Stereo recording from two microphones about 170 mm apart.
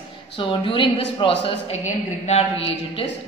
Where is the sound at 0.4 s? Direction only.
30° left (ahead or behind).